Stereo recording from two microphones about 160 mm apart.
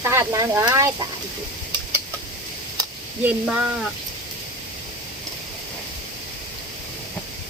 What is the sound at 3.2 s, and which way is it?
Speech, 10° right (ahead or behind).